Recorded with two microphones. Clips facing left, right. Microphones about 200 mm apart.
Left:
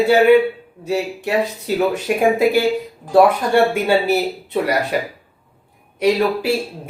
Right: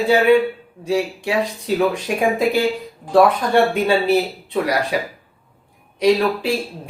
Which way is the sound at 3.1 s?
5° left (ahead or behind).